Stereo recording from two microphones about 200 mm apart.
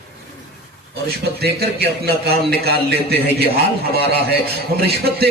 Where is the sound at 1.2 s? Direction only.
55° right (ahead or behind).